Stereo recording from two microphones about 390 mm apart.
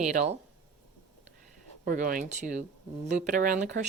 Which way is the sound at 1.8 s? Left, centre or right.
Right.